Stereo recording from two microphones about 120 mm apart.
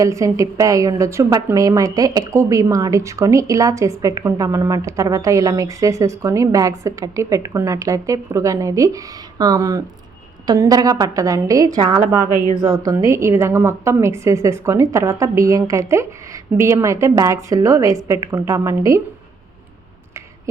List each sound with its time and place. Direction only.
0.0 s a woman's voice: 25° right (ahead or behind)